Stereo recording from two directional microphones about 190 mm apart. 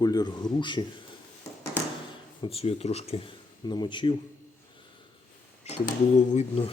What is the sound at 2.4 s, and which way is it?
Speech, 30° left (ahead or behind).